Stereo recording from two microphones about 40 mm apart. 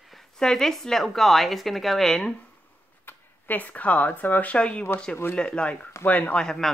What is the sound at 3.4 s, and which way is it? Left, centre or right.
Speech, left.